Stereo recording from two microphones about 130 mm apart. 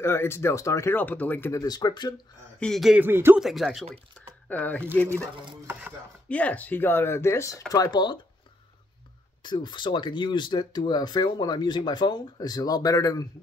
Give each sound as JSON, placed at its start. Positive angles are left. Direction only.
{"t": 0.0, "sound": "speech", "side_deg": 20}
{"t": 1.5, "sound": "speech", "side_deg": 30}
{"t": 2.6, "sound": "speech", "side_deg": 0}
{"t": 3.0, "sound": "speech", "side_deg": -15}
{"t": 3.3, "sound": "speech", "side_deg": 0}
{"t": 4.5, "sound": "speech", "side_deg": 10}
{"t": 5.7, "sound": "chopping", "side_deg": -15}
{"t": 6.2, "sound": "speech", "side_deg": 10}
{"t": 9.4, "sound": "speech", "side_deg": 35}